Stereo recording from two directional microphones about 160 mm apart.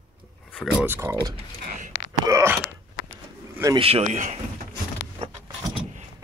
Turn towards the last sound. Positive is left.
turn(degrees=-30)  # may be behind; listen again after turning